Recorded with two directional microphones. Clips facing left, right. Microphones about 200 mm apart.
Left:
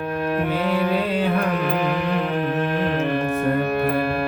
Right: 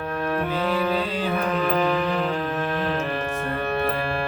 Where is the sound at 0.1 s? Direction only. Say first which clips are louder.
Left 2 dB; 15° left (ahead or behind).